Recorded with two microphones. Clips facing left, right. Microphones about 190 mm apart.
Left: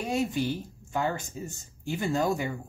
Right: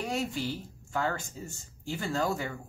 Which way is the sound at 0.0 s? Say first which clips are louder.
Left 4 dB; 20° left (ahead or behind).